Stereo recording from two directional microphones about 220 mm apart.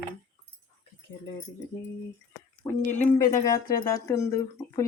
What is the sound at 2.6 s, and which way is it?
Speech, 15° left (ahead or behind).